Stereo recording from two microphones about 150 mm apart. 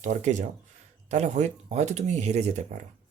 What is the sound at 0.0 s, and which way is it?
Speech, 50° right (ahead or behind).